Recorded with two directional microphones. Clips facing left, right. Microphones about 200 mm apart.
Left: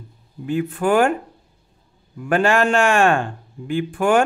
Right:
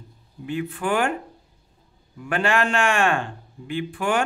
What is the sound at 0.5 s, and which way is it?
Speech, 45° left (ahead or behind).